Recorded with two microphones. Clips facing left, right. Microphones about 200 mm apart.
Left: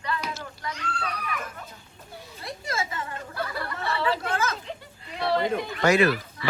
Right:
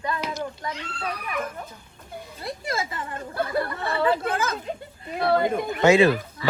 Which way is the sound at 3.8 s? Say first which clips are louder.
Right 2 dB; 50° right (ahead or behind).